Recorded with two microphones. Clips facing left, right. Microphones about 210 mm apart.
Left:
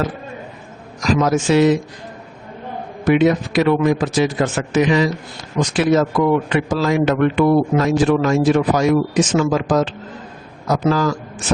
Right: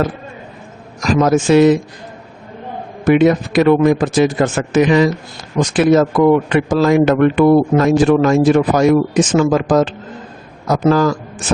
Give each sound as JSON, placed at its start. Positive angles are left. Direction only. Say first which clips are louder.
{"t": 1.0, "sound": "a man's voice", "louder": "right 3 dB", "side_deg": -50}
{"t": 3.0, "sound": "a man's voice", "louder": "right 3 dB", "side_deg": -50}